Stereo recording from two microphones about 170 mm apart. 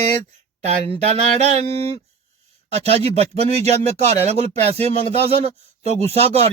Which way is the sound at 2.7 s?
35° right (ahead or behind).